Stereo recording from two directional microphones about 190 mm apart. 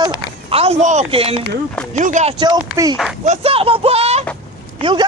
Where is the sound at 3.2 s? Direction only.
35° right (ahead or behind).